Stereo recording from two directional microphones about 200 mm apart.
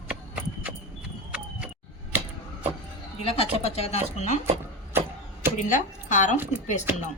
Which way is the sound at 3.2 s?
30° left (ahead or behind).